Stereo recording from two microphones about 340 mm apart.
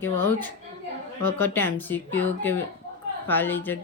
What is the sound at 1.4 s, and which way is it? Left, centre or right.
Speech, centre.